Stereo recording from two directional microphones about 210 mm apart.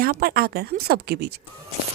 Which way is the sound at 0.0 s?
45° right (ahead or behind).